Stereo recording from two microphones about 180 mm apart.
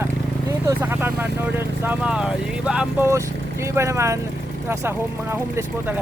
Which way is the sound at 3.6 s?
15° right (ahead or behind).